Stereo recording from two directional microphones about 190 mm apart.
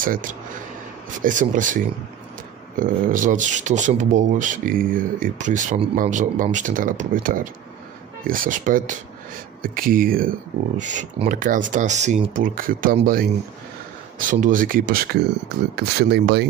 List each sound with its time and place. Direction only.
0.0 s speech: 45° right (ahead or behind)